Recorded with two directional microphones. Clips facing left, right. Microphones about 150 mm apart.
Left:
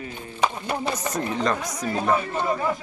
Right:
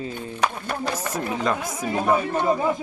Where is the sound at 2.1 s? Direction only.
20° right (ahead or behind).